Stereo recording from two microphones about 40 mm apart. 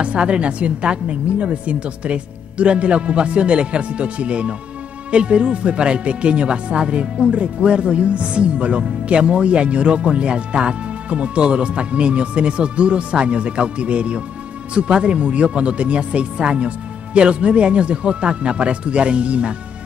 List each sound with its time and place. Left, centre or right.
0.0 s speech: right